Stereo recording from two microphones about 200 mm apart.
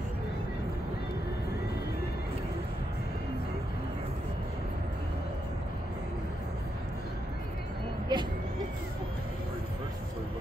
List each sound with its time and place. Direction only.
8.1 s vehicle: 25° right (ahead or behind)